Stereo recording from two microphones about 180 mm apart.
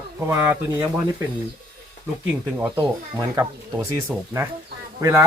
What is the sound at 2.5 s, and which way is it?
Speech, 10° right (ahead or behind).